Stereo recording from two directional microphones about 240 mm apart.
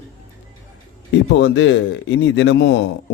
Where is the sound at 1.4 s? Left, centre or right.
Left.